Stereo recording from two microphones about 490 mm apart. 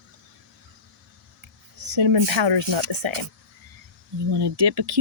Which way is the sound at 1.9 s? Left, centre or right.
Right.